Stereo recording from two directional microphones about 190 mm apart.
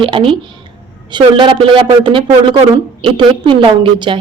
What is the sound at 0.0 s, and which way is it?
Speech, 30° right (ahead or behind).